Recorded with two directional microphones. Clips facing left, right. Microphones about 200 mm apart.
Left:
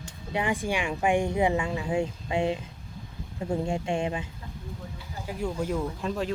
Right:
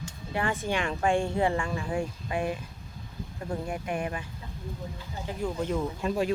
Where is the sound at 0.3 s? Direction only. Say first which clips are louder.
Left 1 dB; 15° left (ahead or behind).